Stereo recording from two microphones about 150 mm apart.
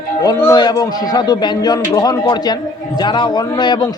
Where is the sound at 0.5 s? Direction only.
25° left (ahead or behind).